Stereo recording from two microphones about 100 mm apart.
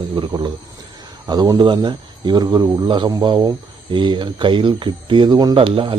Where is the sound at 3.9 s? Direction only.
55° right (ahead or behind).